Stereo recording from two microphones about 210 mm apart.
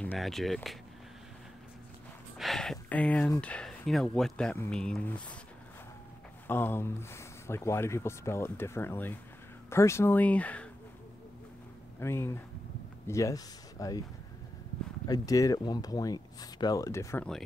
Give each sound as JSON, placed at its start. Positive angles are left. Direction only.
{"t": 0.0, "sound": "speech", "side_deg": 5}
{"t": 2.3, "sound": "speech", "side_deg": 0}
{"t": 6.4, "sound": "speech", "side_deg": 10}
{"t": 12.0, "sound": "speech", "side_deg": 10}
{"t": 15.0, "sound": "speech", "side_deg": 15}